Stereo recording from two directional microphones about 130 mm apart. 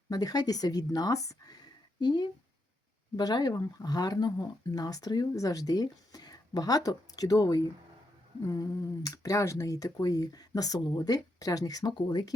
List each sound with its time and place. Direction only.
0.1 s speech: 30° left (ahead or behind)